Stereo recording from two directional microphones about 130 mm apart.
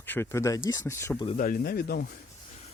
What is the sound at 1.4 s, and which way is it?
Speech, 90° left.